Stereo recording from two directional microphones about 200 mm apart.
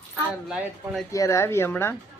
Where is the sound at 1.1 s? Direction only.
15° left (ahead or behind).